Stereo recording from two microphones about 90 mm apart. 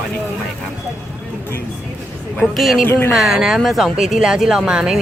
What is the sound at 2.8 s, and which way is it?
Speech, 25° left (ahead or behind).